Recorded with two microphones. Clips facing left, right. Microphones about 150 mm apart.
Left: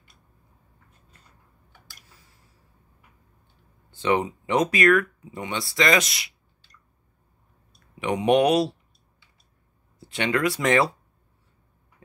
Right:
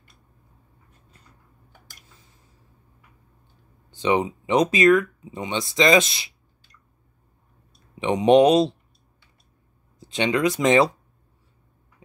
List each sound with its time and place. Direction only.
3.9 s speech: 15° right (ahead or behind)
7.9 s speech: 25° right (ahead or behind)
9.9 s speech: 20° right (ahead or behind)